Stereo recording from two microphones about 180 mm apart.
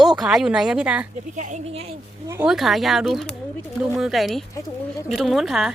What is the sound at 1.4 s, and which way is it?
Speech, 40° right (ahead or behind).